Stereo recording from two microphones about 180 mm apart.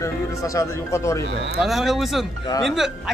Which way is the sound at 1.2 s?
70° right (ahead or behind).